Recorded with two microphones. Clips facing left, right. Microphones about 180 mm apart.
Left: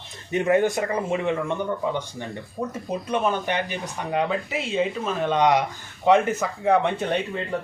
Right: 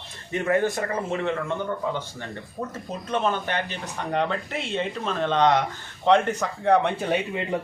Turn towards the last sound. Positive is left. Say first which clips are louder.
# even
turn(degrees=-5)  # may be behind; listen again after turning